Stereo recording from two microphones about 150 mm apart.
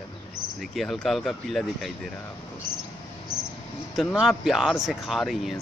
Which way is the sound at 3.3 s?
25° right (ahead or behind).